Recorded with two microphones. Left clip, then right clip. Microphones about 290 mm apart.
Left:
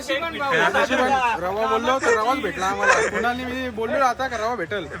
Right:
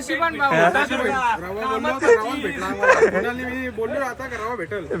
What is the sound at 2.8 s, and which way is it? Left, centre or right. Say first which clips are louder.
Speech: right 4 dB; centre.